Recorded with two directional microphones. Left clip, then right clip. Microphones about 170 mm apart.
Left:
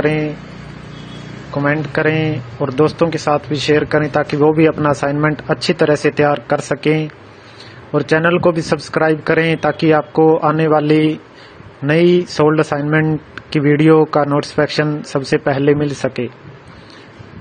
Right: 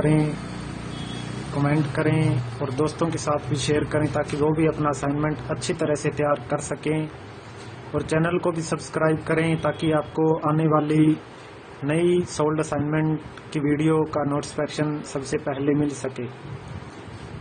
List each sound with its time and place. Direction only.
1.6 s a man's voice: 40° left (ahead or behind)